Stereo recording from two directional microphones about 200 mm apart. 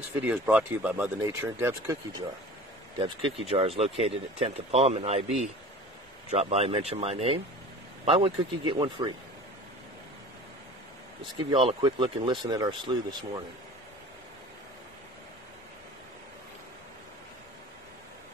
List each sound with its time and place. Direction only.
0.2 s speech: 10° right (ahead or behind)
3.0 s speech: 30° right (ahead or behind)
11.3 s speech: 25° right (ahead or behind)